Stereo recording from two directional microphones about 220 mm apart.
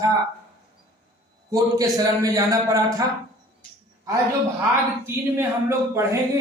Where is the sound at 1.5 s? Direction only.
15° right (ahead or behind).